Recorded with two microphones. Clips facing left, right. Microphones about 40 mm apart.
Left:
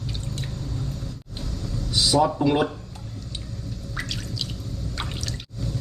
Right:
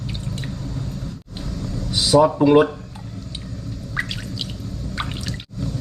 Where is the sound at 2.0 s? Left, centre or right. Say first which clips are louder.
Right 5 dB; centre.